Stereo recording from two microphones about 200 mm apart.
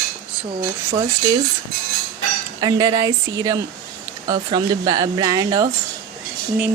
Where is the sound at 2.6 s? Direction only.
15° right (ahead or behind).